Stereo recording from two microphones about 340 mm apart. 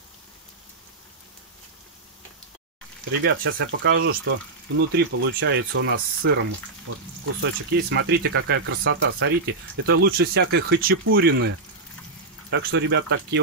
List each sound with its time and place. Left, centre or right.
3.4 s speech: right
7.4 s speech: right